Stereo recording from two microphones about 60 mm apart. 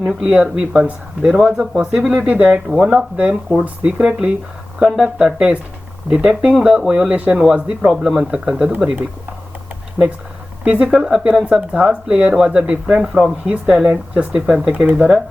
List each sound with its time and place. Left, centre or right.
0.0 s speech: centre
2.7 s speech: centre
10.6 s speech: right